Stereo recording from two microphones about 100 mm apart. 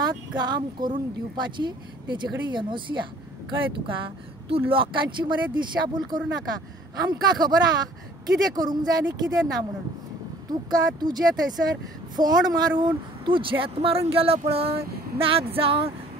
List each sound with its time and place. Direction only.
0.4 s speech: 45° right (ahead or behind)
10.5 s speech: 45° right (ahead or behind); by 14.7 s 75° right (ahead or behind)
15.1 s a sound: 70° right (ahead or behind)